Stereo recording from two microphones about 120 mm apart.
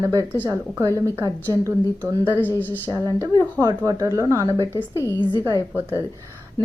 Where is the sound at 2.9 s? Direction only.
30° right (ahead or behind).